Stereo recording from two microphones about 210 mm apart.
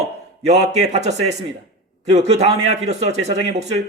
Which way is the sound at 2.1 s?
30° right (ahead or behind).